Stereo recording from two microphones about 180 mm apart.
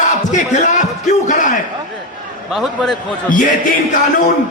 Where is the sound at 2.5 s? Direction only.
Centre (ahead or behind).